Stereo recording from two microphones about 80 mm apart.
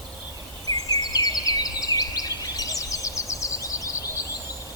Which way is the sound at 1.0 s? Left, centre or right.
Left.